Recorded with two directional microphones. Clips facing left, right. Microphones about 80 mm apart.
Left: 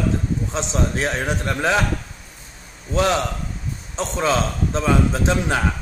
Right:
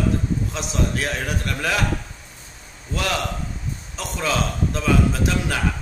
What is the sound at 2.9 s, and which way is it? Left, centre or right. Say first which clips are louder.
A man's voice: left 5 dB; left.